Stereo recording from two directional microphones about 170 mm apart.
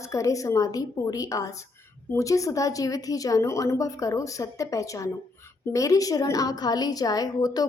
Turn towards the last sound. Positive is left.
turn(degrees=20)  # may be behind; listen again after turning